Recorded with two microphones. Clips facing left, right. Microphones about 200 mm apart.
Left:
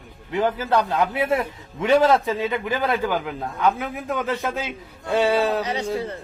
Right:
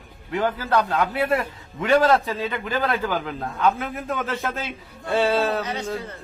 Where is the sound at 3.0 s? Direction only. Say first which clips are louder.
Left 1 dB; 15° left (ahead or behind).